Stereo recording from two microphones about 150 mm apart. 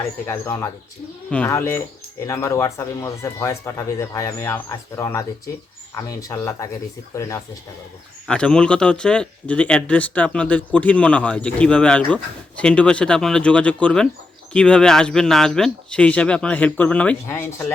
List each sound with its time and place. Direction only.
0.0 s speech: 20° left (ahead or behind)
8.3 s speech: 5° left (ahead or behind)